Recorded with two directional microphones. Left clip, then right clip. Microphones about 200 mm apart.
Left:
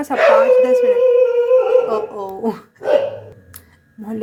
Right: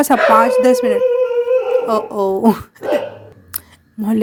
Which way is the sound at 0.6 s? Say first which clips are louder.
Even; 45° right (ahead or behind).